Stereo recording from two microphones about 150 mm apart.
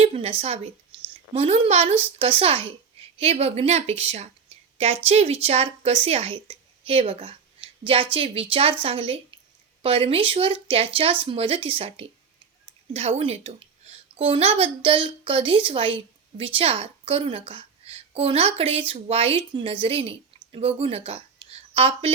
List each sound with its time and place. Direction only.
0.0 s a woman's voice: 40° right (ahead or behind)